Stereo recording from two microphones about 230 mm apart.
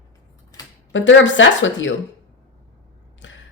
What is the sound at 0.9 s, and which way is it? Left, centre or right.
Speech, left.